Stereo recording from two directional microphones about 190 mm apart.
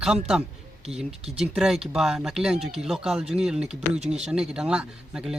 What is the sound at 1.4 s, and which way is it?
Speech, 5° right (ahead or behind).